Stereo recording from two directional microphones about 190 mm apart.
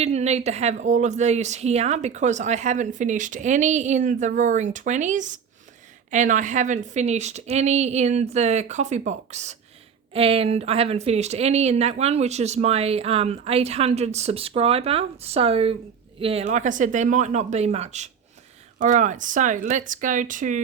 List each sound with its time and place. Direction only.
0.0 s speech: 35° right (ahead or behind)